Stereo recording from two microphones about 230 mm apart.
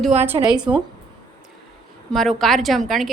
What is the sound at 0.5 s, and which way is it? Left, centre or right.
Speech, centre.